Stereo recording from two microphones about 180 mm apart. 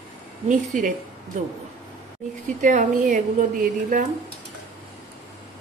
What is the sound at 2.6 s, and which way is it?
Speech, 45° right (ahead or behind).